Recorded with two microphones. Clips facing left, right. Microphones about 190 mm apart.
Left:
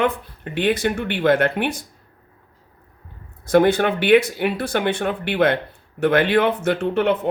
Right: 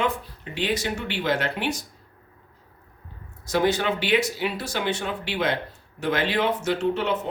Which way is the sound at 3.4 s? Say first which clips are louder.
Left 7 dB; 55° left (ahead or behind).